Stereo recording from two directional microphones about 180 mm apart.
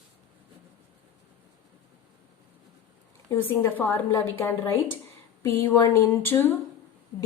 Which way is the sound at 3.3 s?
10° left (ahead or behind).